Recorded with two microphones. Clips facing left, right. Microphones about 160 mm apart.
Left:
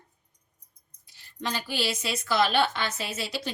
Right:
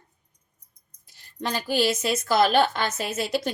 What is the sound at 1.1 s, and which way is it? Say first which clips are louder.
A woman's voice: right 3 dB; 45° right (ahead or behind).